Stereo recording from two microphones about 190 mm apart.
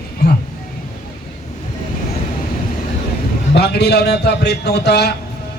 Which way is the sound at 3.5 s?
60° left (ahead or behind).